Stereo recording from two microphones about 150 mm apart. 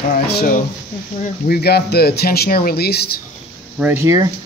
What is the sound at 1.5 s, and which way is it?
Speech, 90° left.